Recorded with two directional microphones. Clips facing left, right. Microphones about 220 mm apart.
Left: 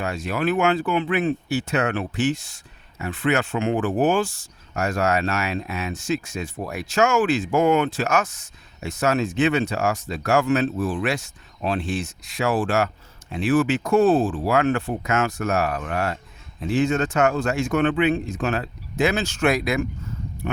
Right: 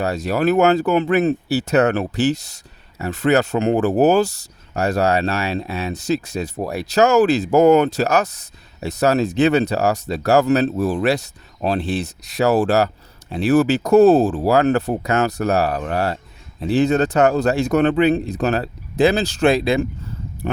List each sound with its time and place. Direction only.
0.0 s speech: 40° right (ahead or behind)